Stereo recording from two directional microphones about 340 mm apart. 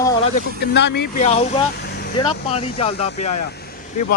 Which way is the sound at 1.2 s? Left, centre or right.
Centre.